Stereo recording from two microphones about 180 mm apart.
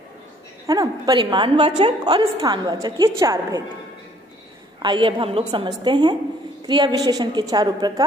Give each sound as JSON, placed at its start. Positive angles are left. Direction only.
{"t": 0.7, "sound": "a woman's voice", "side_deg": -20}
{"t": 4.8, "sound": "a woman's voice", "side_deg": -25}